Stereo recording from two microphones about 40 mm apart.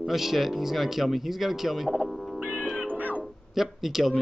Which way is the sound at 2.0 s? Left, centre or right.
Centre.